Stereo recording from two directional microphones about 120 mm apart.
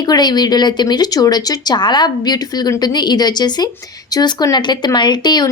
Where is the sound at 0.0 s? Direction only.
35° left (ahead or behind).